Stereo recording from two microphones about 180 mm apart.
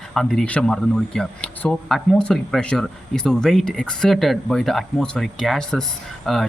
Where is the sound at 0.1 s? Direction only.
Centre (ahead or behind).